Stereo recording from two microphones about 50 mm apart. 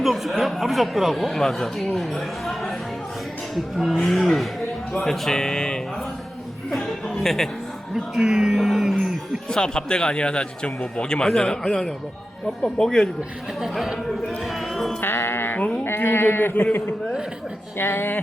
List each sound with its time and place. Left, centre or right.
0.0 s speech: centre
3.5 s speech: centre
6.7 s speech: centre
7.9 s speech: centre
8.5 s speech: centre
9.5 s speech: centre
13.6 s speech: centre
15.0 s music: left
15.8 s speech: left
17.7 s speech: left